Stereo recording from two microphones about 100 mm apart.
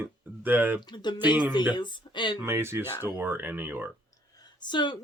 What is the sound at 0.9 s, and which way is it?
A woman's voice, 45° left (ahead or behind).